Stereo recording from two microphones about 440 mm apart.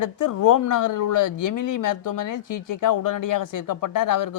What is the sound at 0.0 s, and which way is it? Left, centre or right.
Speech, left.